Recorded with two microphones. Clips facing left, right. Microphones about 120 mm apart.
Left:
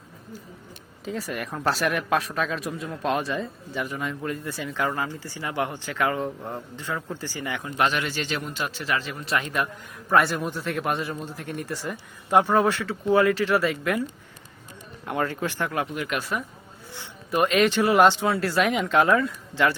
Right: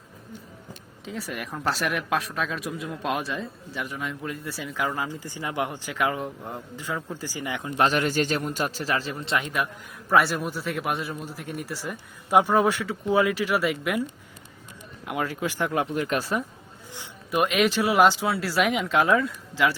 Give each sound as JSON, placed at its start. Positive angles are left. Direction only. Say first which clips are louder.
{"t": 1.0, "sound": "speech", "louder": "left 3 dB", "side_deg": 0}
{"t": 7.8, "sound": "a man's voice", "louder": "right 3 dB", "side_deg": -40}
{"t": 9.4, "sound": "speech", "louder": "left 1 dB", "side_deg": -5}
{"t": 15.0, "sound": "speech", "louder": "left 1 dB", "side_deg": -5}
{"t": 17.3, "sound": "speech", "louder": "left 2 dB", "side_deg": 0}